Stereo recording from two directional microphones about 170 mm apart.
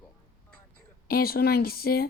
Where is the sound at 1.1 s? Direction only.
60° left (ahead or behind).